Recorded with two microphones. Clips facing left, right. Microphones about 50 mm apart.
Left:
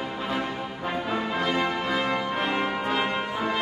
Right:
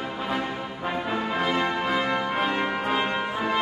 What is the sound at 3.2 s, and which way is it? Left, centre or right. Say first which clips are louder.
Brass instrument: right 1 dB; centre.